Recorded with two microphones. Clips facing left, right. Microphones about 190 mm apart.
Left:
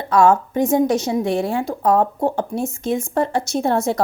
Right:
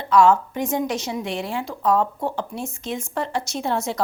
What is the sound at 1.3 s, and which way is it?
A woman's voice, 50° left (ahead or behind).